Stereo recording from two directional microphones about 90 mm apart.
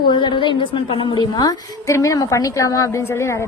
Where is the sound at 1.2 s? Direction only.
50° left (ahead or behind).